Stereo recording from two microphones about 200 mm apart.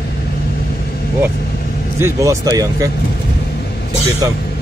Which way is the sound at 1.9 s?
15° right (ahead or behind).